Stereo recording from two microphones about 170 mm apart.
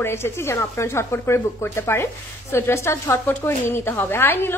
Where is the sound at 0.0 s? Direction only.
15° left (ahead or behind).